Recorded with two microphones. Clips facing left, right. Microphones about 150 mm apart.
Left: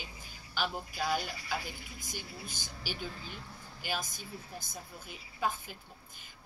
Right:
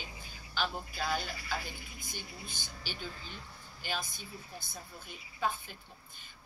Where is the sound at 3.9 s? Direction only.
45° left (ahead or behind).